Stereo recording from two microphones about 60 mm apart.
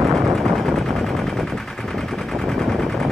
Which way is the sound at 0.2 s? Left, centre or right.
Centre.